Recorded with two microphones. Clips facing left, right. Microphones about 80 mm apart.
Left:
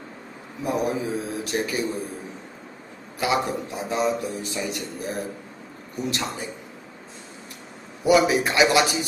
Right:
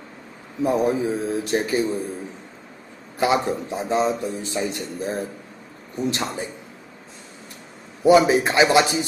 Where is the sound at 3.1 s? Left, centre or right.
Right.